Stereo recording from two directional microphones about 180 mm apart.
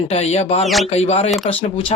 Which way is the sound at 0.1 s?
35° left (ahead or behind).